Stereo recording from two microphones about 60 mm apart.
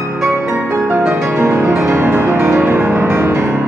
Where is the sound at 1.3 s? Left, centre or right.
Right.